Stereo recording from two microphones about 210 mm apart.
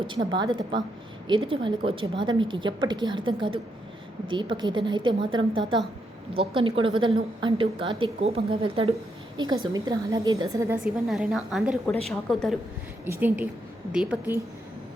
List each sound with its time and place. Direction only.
0.1 s a woman's voice: 20° right (ahead or behind)
10.8 s a woman's voice: centre (ahead or behind)